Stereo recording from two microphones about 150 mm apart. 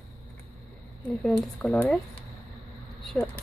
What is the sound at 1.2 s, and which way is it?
Speech, 5° left (ahead or behind).